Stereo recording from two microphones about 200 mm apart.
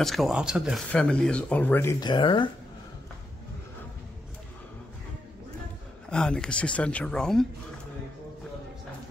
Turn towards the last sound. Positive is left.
turn(degrees=5)  # may be behind; listen again after turning